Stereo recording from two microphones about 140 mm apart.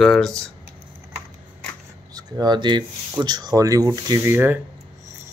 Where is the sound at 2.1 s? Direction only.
30° right (ahead or behind).